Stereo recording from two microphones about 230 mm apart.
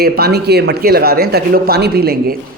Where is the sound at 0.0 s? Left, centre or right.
Right.